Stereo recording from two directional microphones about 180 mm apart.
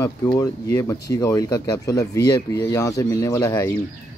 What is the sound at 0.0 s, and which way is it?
Speech, 20° left (ahead or behind).